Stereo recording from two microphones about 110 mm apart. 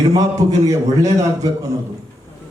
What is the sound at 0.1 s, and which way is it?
A man's voice, 30° right (ahead or behind).